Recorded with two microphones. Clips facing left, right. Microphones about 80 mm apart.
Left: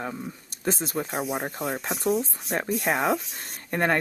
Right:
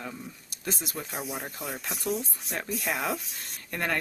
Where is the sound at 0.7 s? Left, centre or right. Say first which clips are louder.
Left 7 dB; left.